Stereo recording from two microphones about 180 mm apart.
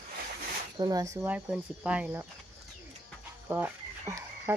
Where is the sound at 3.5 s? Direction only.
15° right (ahead or behind).